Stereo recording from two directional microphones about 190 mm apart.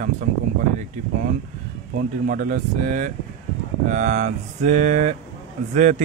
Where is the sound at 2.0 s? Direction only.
45° right (ahead or behind).